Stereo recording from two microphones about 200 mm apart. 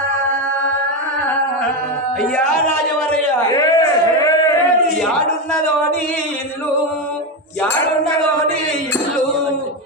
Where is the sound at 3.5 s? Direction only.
20° left (ahead or behind).